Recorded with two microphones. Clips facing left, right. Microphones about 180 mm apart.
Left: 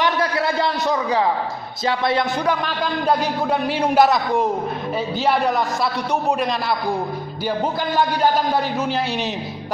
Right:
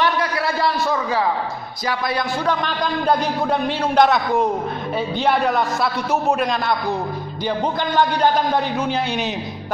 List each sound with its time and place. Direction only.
0.2 s a sound: 20° left (ahead or behind)
1.9 s a man's voice: 25° left (ahead or behind)
2.4 s a man's voice: 5° left (ahead or behind)
7.4 s music: 5° left (ahead or behind)
8.7 s a man's voice: centre (ahead or behind)